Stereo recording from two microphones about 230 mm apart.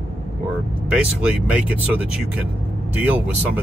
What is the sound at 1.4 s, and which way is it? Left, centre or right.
Speech, centre.